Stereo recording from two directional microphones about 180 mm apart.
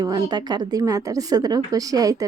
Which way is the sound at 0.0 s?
20° right (ahead or behind).